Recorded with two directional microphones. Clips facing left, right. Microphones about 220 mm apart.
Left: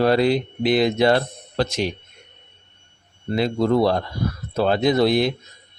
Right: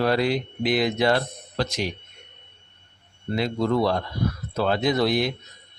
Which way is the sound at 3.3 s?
30° left (ahead or behind).